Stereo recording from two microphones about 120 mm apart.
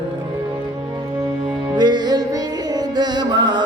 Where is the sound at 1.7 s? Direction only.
35° right (ahead or behind).